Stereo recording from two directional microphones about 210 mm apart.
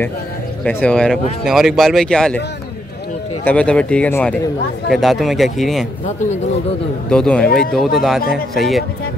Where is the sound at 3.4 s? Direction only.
5° left (ahead or behind).